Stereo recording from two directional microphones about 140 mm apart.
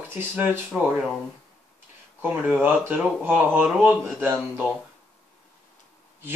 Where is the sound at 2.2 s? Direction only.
10° right (ahead or behind).